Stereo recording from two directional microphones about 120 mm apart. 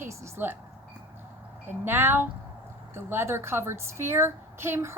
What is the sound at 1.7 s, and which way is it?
A woman's voice, 20° right (ahead or behind).